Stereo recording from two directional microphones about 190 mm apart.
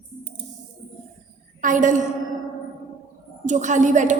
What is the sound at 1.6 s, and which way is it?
Speech, 45° right (ahead or behind).